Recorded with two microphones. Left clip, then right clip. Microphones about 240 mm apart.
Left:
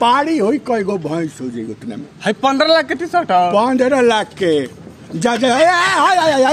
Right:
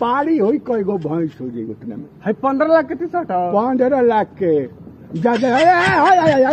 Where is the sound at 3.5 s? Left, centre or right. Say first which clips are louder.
Left 2 dB; centre.